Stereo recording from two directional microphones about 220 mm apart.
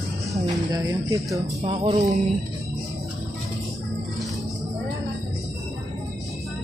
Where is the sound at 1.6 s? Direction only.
30° right (ahead or behind).